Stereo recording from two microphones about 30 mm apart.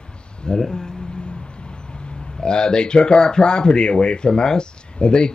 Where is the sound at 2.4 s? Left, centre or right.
Left.